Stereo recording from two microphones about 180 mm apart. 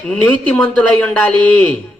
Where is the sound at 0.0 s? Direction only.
5° left (ahead or behind).